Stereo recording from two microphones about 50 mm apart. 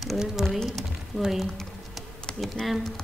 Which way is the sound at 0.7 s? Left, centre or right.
Centre.